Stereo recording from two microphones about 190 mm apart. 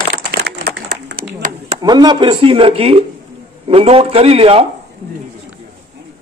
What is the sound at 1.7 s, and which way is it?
Speech, 20° right (ahead or behind).